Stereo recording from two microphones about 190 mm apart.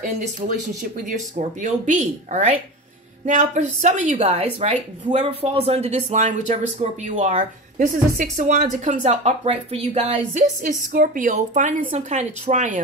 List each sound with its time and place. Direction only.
1.0 s speech: 40° right (ahead or behind)
10.6 s a woman's voice: 50° right (ahead or behind)